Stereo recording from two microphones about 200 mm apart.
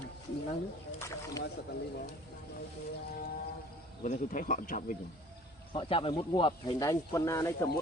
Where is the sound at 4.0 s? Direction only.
40° left (ahead or behind).